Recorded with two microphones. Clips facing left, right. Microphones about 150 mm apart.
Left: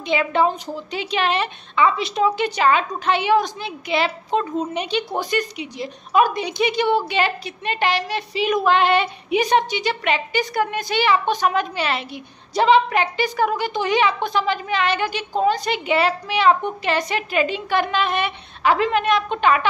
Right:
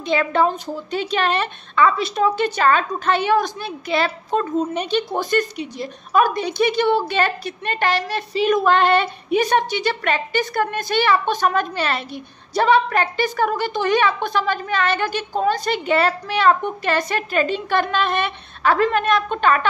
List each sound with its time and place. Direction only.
0.0 s a woman's voice: 15° left (ahead or behind)